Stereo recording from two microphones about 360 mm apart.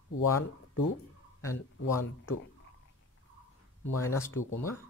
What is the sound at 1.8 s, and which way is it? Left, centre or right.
Speech, left.